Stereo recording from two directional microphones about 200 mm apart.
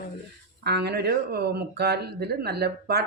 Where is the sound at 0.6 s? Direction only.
55° right (ahead or behind).